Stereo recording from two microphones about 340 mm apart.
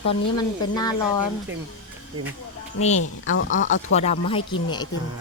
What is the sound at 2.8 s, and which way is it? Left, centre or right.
Speech, centre.